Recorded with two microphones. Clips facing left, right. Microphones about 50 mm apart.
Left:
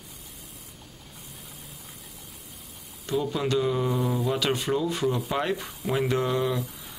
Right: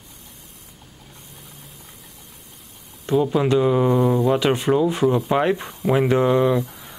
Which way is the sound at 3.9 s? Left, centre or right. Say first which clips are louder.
Right 9 dB; centre.